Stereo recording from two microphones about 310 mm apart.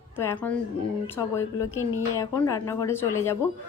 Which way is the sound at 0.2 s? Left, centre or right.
Centre.